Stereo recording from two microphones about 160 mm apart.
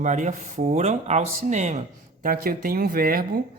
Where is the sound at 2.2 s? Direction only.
65° right (ahead or behind).